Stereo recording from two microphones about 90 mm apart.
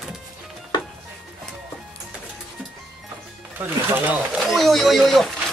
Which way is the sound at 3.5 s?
20° right (ahead or behind).